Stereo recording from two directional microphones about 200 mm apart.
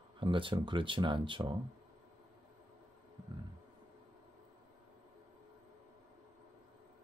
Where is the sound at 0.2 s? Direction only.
25° right (ahead or behind).